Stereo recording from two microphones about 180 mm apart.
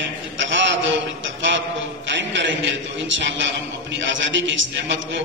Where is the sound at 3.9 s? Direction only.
90° right.